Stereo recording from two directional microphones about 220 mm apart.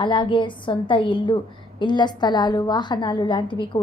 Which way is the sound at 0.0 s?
20° left (ahead or behind).